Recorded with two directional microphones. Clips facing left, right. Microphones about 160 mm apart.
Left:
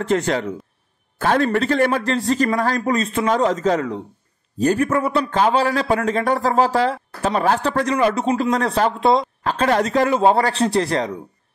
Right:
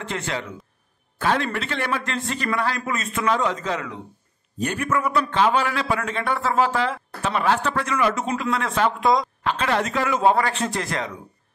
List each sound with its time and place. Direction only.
0.0 s a man's voice: 40° left (ahead or behind)